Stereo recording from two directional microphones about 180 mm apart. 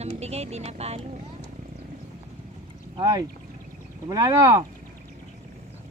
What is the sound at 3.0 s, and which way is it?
Speech, 20° right (ahead or behind).